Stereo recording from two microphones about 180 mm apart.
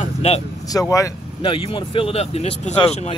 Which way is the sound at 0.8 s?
20° left (ahead or behind).